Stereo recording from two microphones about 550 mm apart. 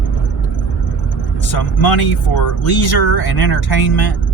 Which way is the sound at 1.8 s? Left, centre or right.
Left.